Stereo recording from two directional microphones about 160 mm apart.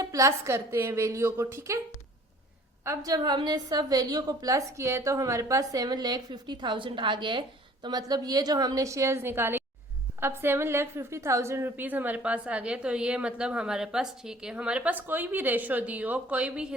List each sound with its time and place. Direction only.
0.0 s a woman's voice: 20° right (ahead or behind)
2.8 s a woman's voice: 20° right (ahead or behind)